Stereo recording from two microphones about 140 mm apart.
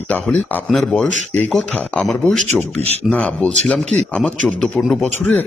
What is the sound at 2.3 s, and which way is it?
Speech, 50° right (ahead or behind).